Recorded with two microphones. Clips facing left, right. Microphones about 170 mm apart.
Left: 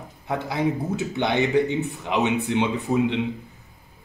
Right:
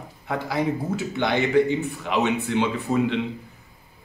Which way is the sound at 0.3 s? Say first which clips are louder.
Even; 20° left (ahead or behind).